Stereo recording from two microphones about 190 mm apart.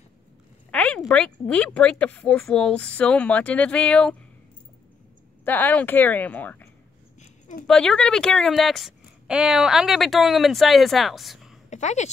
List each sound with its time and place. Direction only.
0.7 s speech: 5° left (ahead or behind)
5.4 s speech: 10° left (ahead or behind)
7.2 s a sound: 40° left (ahead or behind)
7.6 s speech: 5° left (ahead or behind)
11.7 s a woman's voice: 35° left (ahead or behind)